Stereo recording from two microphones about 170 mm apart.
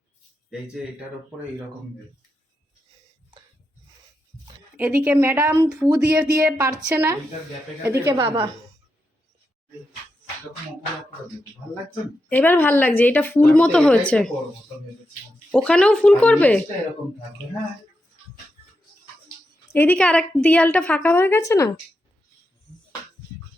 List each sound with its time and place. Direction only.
4.8 s speech: 10° right (ahead or behind)
12.3 s a woman's voice: 10° left (ahead or behind)
15.5 s a woman's voice: 5° left (ahead or behind)
19.7 s a woman's voice: 10° left (ahead or behind)